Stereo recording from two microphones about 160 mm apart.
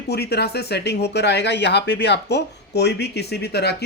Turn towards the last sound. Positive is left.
turn(degrees=90)